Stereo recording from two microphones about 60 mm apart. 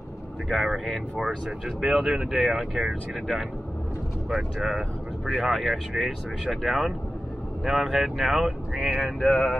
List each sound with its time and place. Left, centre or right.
0.5 s speech: centre
9.2 s speech: centre